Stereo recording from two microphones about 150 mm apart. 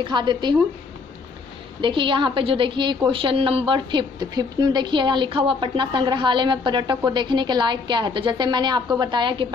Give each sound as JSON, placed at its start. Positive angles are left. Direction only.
{"t": 0.0, "sound": "a woman's voice", "side_deg": -30}
{"t": 1.8, "sound": "a woman's voice", "side_deg": -35}